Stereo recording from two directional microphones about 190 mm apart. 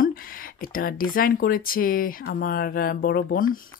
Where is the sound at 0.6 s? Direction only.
50° left (ahead or behind).